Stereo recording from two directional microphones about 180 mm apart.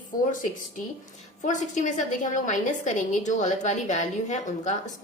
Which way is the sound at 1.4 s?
45° left (ahead or behind).